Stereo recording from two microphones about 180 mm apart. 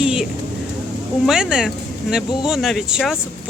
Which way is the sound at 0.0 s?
5° right (ahead or behind).